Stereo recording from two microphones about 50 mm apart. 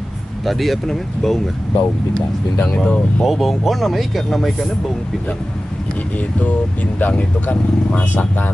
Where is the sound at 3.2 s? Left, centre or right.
Centre.